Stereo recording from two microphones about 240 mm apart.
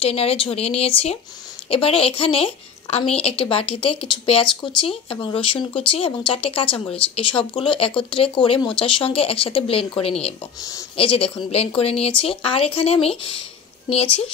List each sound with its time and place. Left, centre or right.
0.0 s a woman's voice: left